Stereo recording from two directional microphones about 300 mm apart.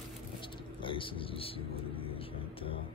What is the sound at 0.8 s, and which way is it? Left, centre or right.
Music, centre.